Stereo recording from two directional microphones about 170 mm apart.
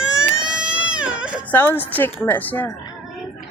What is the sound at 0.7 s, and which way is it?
Baby cry, 5° right (ahead or behind).